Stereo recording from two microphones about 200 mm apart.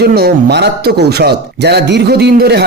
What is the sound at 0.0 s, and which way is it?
A man's voice, 50° right (ahead or behind).